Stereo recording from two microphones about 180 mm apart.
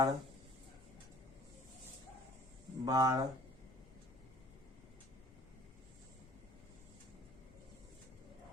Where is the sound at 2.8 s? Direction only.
20° right (ahead or behind).